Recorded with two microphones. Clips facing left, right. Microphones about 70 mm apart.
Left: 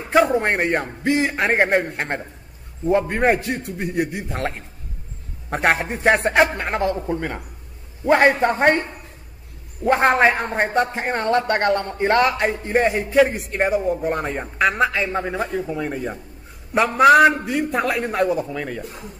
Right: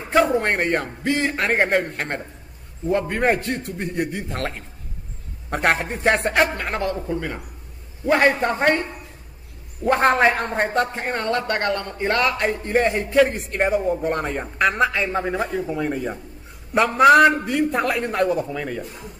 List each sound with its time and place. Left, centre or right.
0.1 s a man's voice: centre
6.6 s a man's voice: centre
7.0 s a man's voice: left
8.0 s a man's voice: left
8.3 s a man's voice: centre
9.8 s a man's voice: centre
10.3 s a man's voice: centre
11.1 s a man's voice: left
12.4 s a man's voice: centre